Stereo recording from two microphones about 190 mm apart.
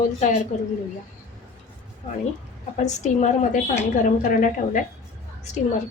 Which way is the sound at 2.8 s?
40° left (ahead or behind).